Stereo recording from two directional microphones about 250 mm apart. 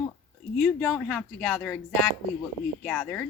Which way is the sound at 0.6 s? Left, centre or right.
Centre.